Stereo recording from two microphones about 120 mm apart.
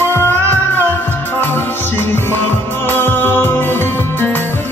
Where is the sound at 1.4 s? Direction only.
20° left (ahead or behind).